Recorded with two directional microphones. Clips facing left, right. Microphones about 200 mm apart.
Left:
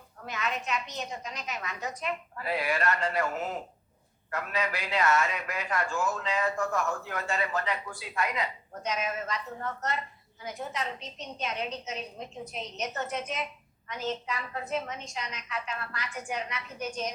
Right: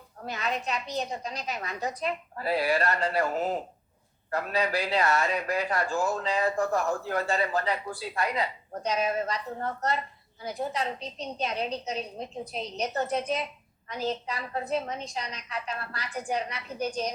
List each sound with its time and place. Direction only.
0.2 s a man's voice: 35° right (ahead or behind)